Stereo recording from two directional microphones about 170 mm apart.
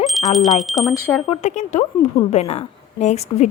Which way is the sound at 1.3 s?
45° left (ahead or behind).